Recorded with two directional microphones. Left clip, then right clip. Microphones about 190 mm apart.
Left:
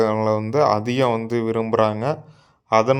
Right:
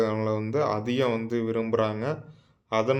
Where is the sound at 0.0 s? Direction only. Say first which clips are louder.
Left 7 dB; 35° left (ahead or behind).